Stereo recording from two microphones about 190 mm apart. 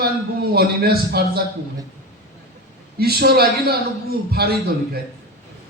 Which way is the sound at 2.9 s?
55° right (ahead or behind).